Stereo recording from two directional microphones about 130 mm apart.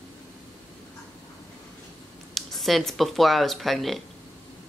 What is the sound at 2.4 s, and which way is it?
Speech, centre (ahead or behind).